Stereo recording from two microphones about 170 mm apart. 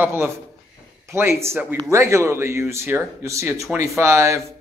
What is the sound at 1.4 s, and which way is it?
A man's voice, 15° right (ahead or behind).